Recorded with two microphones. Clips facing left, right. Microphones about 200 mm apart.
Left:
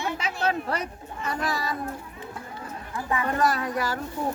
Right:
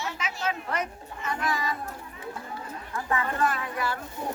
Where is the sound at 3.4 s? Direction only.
40° left (ahead or behind).